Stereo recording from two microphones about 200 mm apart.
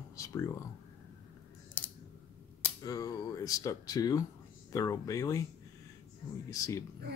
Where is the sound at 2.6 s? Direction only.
20° left (ahead or behind).